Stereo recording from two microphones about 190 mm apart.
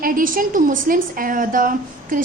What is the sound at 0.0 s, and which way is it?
A woman's voice, 45° right (ahead or behind).